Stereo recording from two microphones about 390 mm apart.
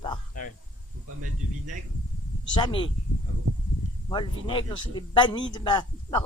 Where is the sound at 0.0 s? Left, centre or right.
Centre.